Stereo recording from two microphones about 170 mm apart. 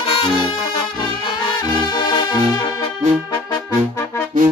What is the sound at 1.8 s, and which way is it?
Brass instrument, 25° left (ahead or behind).